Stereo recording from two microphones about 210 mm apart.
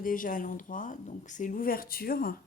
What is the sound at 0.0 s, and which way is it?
Speech, 40° left (ahead or behind).